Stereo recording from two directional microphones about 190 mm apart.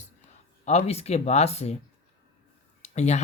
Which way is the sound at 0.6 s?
35° left (ahead or behind).